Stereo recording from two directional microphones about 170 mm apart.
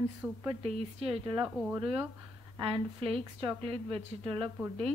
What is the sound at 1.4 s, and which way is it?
Speech, 10° right (ahead or behind).